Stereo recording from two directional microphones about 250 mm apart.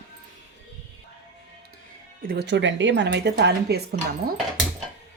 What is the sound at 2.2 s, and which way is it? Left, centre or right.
Speech, right.